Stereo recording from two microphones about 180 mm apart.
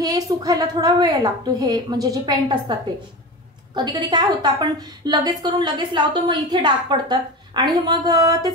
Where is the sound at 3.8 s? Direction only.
25° right (ahead or behind).